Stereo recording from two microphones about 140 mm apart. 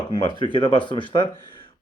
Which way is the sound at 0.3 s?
35° left (ahead or behind).